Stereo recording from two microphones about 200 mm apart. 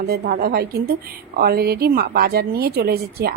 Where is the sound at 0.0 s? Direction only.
50° right (ahead or behind).